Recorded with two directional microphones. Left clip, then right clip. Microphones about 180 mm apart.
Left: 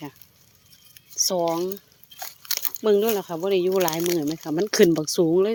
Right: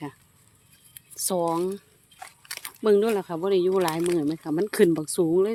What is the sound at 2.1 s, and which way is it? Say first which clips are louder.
Crunch: left 8 dB; 45° left (ahead or behind).